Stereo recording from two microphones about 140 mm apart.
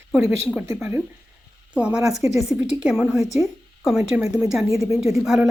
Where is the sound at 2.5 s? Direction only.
10° right (ahead or behind).